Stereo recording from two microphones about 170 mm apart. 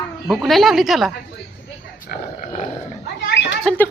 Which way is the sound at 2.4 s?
45° left (ahead or behind).